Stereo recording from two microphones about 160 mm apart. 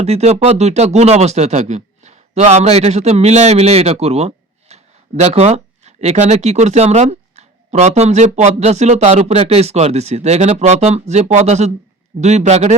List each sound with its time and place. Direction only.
0.0 s speech: 40° right (ahead or behind)